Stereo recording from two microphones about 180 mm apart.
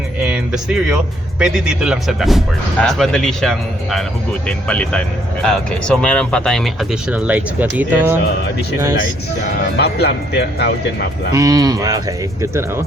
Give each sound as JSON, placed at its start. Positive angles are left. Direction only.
{"t": 0.2, "sound": "speech", "side_deg": -5}
{"t": 9.7, "sound": "speech", "side_deg": 65}
{"t": 11.3, "sound": "speech", "side_deg": -20}